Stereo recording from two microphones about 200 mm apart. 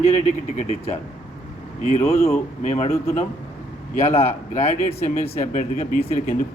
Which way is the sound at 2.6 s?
35° left (ahead or behind).